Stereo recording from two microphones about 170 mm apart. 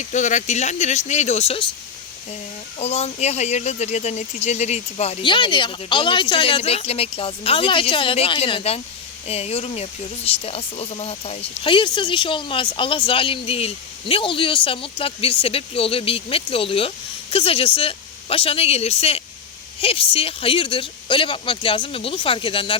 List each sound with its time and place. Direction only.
0.0 s speech: 45° left (ahead or behind)
2.7 s speech: 40° left (ahead or behind)